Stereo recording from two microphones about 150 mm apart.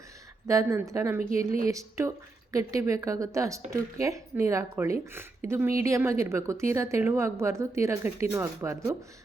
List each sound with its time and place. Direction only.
0.4 s speech: 20° right (ahead or behind)